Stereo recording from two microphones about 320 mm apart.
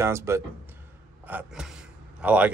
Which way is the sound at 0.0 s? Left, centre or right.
Centre.